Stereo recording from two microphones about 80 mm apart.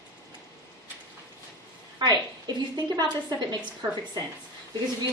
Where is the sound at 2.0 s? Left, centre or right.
Right.